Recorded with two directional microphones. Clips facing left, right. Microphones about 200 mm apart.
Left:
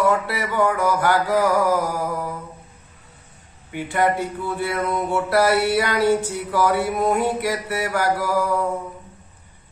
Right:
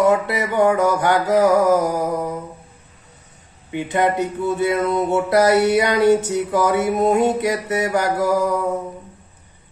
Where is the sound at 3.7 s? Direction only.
20° right (ahead or behind).